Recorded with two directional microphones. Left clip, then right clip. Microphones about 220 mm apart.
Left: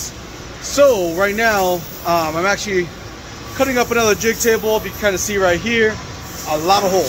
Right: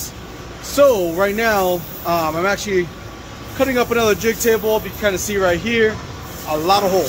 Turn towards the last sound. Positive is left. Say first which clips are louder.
# left 1 dB
turn(degrees=5)  # may be behind; listen again after turning